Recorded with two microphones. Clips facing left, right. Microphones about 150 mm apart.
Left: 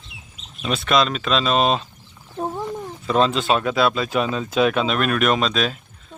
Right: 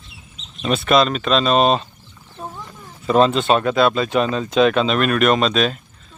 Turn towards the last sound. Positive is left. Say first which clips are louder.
# right 3 dB
turn(degrees=0)  # may be behind; listen again after turning